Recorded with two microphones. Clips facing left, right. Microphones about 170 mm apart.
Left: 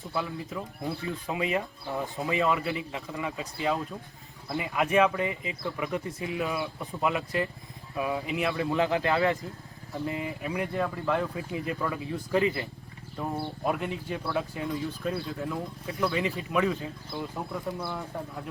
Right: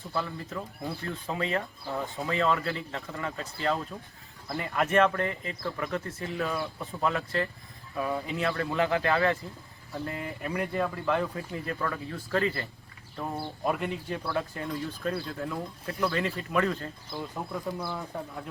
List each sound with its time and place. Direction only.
0.1 s speech: 5° left (ahead or behind)
1.3 s speech: 15° left (ahead or behind)
9.9 s speech: 5° left (ahead or behind)
13.1 s speech: 5° left (ahead or behind)